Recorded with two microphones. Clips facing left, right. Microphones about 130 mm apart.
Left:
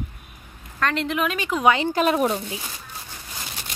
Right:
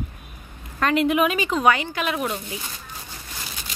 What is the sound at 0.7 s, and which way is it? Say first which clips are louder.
Speech: right 4 dB; 10° right (ahead or behind).